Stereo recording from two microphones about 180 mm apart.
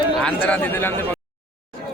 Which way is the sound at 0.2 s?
5° left (ahead or behind).